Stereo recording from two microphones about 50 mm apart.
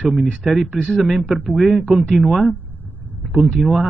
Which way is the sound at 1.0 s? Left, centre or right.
Right.